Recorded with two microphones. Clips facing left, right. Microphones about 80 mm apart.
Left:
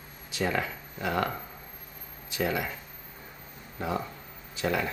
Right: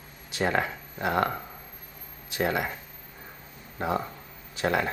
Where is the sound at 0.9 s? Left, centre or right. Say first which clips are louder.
Right 3 dB; right.